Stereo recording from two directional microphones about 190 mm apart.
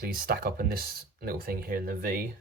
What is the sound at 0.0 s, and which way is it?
Speech, 50° right (ahead or behind).